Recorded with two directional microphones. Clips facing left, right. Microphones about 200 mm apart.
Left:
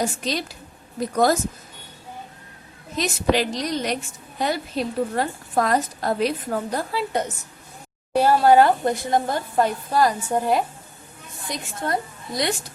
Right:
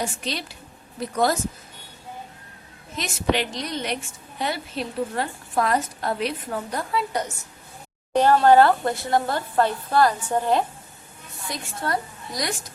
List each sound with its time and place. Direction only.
0.0 s a woman's voice: 40° left (ahead or behind)
2.9 s a woman's voice: 35° left (ahead or behind)
8.1 s a woman's voice: 10° left (ahead or behind); by 12.5 s 25° left (ahead or behind)